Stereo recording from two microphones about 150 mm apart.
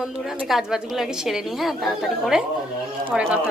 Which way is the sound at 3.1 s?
10° right (ahead or behind).